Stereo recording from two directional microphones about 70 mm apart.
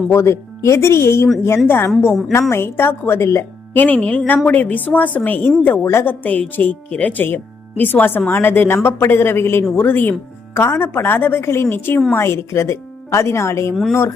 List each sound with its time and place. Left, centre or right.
0.1 s speech: left
3.8 s speech: left
5.8 s speech: left
6.1 s speech: left